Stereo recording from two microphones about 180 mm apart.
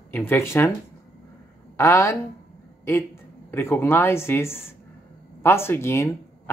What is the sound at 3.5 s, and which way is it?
Speech, 15° left (ahead or behind).